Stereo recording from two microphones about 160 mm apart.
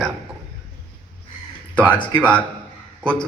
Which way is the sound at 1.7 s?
10° left (ahead or behind).